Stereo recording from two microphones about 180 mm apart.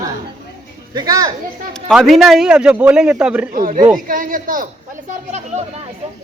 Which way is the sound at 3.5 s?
45° right (ahead or behind).